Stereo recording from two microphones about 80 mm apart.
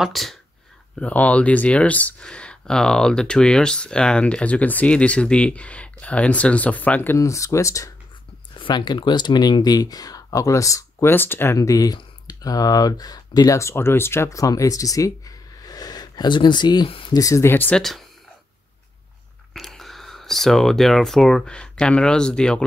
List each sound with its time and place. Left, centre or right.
0.0 s speech: centre
0.9 s speech: centre
7.2 s speech: left
8.5 s speech: left
11.1 s speech: left
11.5 s speech: left
13.6 s speech: left
14.3 s speech: left
17.1 s speech: left
17.5 s speech: left
17.7 s speech: centre
19.5 s speech: centre